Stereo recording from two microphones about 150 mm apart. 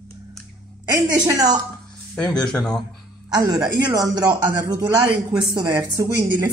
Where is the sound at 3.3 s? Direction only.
25° right (ahead or behind).